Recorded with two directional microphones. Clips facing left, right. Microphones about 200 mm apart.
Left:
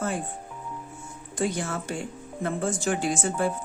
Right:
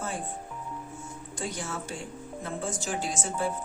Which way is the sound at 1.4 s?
60° left (ahead or behind).